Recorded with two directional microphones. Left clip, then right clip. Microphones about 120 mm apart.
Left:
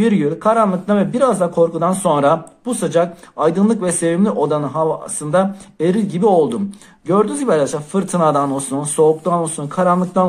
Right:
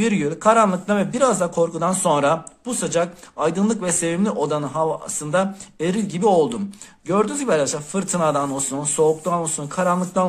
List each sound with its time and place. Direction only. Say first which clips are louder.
0.0 s speech: left 3 dB; 20° right (ahead or behind)
2.3 s speech: left 5 dB; 5° right (ahead or behind)